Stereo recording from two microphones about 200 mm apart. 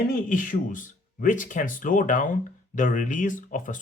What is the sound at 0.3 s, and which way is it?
Speech, 40° left (ahead or behind).